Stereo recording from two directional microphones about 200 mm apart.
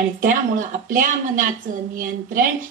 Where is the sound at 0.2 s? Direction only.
45° right (ahead or behind).